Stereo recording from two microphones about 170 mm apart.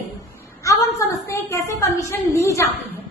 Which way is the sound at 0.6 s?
20° left (ahead or behind).